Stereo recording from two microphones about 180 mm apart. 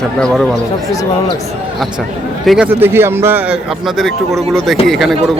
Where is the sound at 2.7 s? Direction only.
10° right (ahead or behind).